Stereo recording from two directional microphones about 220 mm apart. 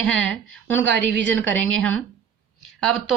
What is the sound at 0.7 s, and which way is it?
Speech, 55° right (ahead or behind).